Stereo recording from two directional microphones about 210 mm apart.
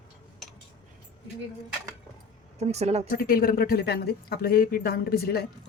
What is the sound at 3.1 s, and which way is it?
Speech, 45° left (ahead or behind).